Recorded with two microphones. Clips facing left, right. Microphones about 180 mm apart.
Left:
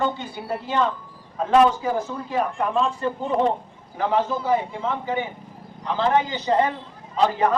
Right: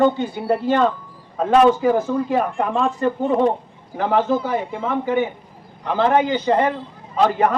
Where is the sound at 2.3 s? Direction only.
55° right (ahead or behind).